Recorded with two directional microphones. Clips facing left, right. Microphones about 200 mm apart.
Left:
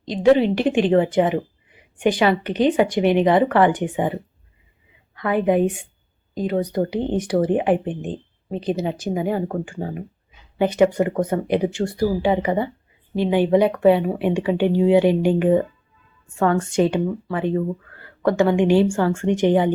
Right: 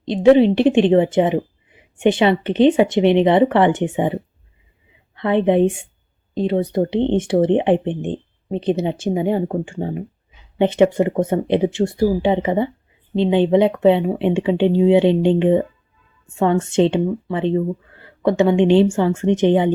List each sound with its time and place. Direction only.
0.0 s speech: 25° right (ahead or behind)